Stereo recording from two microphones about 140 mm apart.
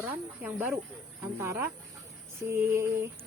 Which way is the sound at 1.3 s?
20° right (ahead or behind).